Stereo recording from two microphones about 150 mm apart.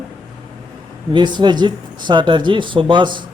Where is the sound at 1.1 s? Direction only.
30° right (ahead or behind).